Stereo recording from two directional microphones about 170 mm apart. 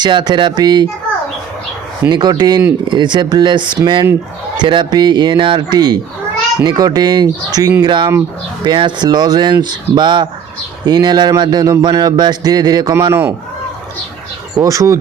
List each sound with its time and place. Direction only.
0.0 s speech: 25° right (ahead or behind)
2.0 s speech: 25° right (ahead or behind)
14.5 s speech: 20° right (ahead or behind)